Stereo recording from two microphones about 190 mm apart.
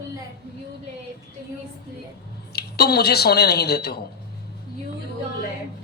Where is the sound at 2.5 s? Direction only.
55° left (ahead or behind).